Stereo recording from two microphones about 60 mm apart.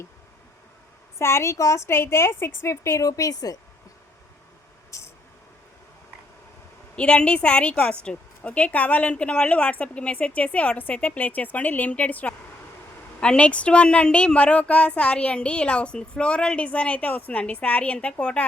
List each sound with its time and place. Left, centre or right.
1.2 s a woman's voice: left
1.9 s a woman's voice: left
3.1 s a woman's voice: left
4.9 s a sound: left
6.9 s speech: centre